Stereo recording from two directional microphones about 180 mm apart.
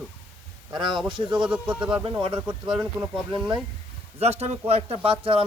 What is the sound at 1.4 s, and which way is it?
Speech, 5° right (ahead or behind).